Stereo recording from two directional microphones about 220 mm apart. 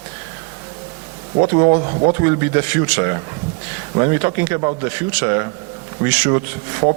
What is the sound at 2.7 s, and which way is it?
A man's voice, 15° right (ahead or behind).